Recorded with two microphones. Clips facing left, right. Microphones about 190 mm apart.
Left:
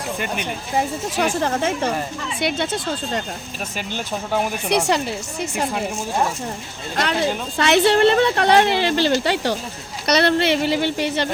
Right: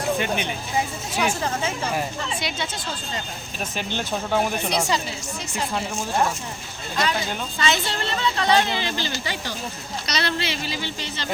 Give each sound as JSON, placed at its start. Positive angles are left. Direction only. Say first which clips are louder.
{"t": 0.8, "sound": "speech", "louder": "left 4 dB", "side_deg": 45}
{"t": 2.4, "sound": "speech", "louder": "left 7 dB", "side_deg": 55}
{"t": 3.8, "sound": "speech", "louder": "even", "side_deg": 5}
{"t": 4.9, "sound": "speech", "louder": "left 5 dB", "side_deg": 60}
{"t": 6.9, "sound": "speech", "louder": "left 4 dB", "side_deg": 65}